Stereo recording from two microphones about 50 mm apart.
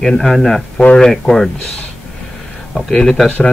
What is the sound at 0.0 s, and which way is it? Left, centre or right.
Speech, centre.